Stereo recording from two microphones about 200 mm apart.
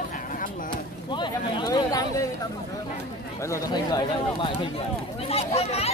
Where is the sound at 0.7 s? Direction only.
25° left (ahead or behind).